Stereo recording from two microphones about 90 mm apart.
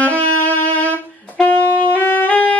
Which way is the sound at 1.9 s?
20° left (ahead or behind).